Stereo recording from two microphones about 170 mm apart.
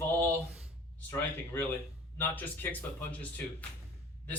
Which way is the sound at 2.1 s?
10° left (ahead or behind).